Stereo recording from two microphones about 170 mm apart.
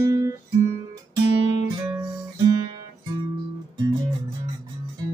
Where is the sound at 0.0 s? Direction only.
20° right (ahead or behind).